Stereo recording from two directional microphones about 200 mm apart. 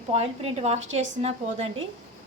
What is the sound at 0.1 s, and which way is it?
A woman's voice, 30° right (ahead or behind).